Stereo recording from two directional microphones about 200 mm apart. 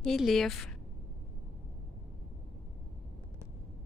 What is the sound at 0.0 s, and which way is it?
Speech, centre (ahead or behind).